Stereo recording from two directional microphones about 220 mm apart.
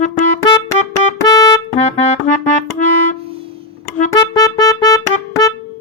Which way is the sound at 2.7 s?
35° left (ahead or behind).